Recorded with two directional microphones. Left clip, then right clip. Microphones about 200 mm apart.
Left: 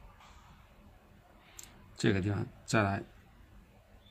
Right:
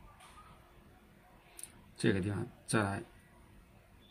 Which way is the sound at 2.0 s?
20° left (ahead or behind).